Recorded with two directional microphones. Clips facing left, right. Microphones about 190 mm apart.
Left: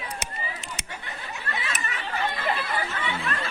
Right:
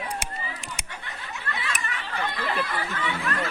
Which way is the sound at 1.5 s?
20° left (ahead or behind).